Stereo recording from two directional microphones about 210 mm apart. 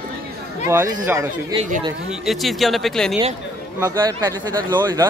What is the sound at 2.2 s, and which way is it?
Speech, centre (ahead or behind).